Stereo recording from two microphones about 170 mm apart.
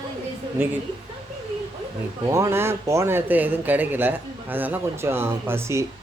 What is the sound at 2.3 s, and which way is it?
Speech, 15° right (ahead or behind).